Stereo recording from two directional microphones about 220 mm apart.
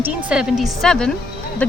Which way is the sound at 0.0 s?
5° right (ahead or behind).